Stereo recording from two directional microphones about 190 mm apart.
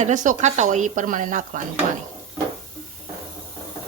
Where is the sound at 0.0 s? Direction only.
40° right (ahead or behind).